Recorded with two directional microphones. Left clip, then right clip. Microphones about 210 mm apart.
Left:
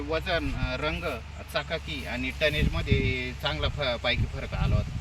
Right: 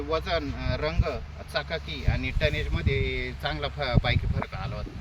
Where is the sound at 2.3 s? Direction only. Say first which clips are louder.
Left 3 dB; 10° right (ahead or behind).